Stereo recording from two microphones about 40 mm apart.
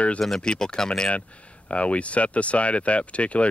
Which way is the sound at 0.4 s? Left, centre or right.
Centre.